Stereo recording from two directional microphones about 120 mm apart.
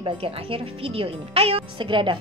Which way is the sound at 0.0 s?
50° right (ahead or behind).